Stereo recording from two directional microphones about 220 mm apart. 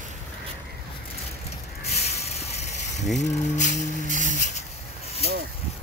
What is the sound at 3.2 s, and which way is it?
Music, 35° left (ahead or behind).